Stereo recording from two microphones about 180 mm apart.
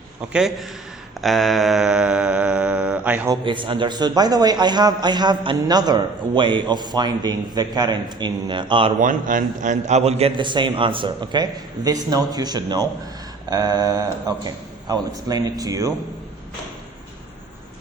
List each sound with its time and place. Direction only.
0.3 s a man's voice: centre (ahead or behind)
1.2 s a sound: centre (ahead or behind)
3.4 s a man's voice: 25° right (ahead or behind)
9.0 s a man's voice: 45° right (ahead or behind); by 15.9 s 20° right (ahead or behind)